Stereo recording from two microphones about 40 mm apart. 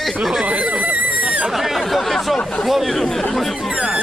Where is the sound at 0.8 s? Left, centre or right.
Right.